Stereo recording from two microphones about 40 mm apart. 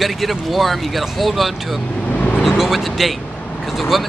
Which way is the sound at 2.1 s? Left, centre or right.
Left.